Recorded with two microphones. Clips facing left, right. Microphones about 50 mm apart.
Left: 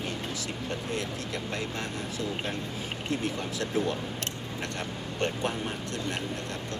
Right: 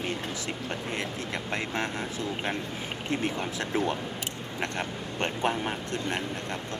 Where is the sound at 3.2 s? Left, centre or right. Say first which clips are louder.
Right 1 dB; right.